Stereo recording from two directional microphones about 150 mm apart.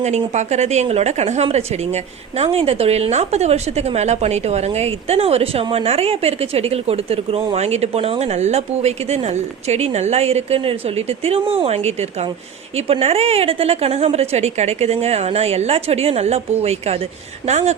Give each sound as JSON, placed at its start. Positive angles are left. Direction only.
{"t": 0.0, "sound": "speech", "side_deg": -50}